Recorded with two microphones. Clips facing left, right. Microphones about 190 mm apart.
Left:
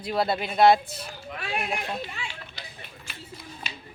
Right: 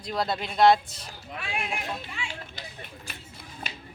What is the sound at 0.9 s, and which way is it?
Speech, 55° left (ahead or behind).